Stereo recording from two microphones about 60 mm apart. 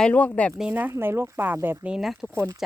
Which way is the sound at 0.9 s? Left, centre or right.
Right.